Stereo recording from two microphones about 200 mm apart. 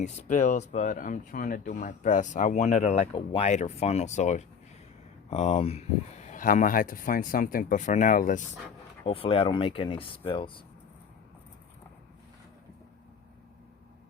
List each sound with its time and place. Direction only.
0.0 s speech: 35° left (ahead or behind)
9.0 s speech: 30° left (ahead or behind)